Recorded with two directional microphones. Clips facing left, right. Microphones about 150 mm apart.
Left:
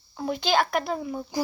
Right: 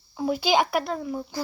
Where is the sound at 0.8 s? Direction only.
5° left (ahead or behind).